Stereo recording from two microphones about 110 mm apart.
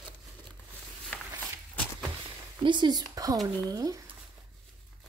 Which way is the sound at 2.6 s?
45° right (ahead or behind).